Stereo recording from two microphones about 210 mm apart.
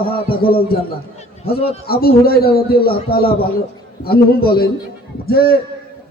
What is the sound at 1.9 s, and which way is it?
A man's voice, 45° left (ahead or behind).